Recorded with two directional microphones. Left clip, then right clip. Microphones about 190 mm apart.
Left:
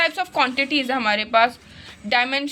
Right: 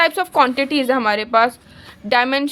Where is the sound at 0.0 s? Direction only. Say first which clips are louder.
Right 5 dB; 40° right (ahead or behind).